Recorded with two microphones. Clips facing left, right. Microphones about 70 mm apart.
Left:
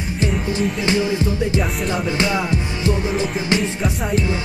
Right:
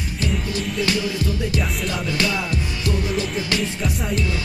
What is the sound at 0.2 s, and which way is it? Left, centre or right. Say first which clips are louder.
Music: left 5 dB; left.